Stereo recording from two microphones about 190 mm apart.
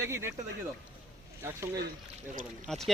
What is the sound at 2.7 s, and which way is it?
Speech, centre (ahead or behind).